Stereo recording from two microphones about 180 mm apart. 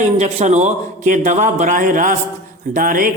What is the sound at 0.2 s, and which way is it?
Speech, 40° right (ahead or behind).